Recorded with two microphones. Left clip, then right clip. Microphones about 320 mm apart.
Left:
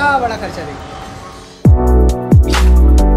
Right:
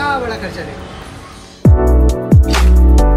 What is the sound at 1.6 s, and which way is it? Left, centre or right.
Music, centre.